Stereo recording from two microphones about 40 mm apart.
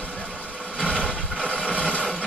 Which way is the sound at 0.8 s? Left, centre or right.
Left.